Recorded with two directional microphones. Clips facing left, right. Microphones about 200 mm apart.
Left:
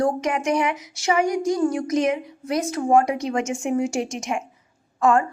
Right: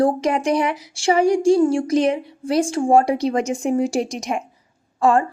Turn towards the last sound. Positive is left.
turn(degrees=-30)  # may be behind; listen again after turning